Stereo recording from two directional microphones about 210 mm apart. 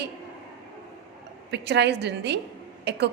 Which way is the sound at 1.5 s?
55° right (ahead or behind).